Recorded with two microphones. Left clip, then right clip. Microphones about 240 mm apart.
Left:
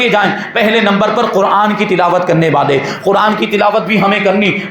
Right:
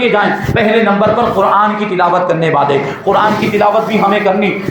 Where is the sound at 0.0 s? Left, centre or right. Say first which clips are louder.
Even; left.